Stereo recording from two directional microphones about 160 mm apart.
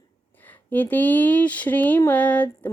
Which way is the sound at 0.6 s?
10° left (ahead or behind).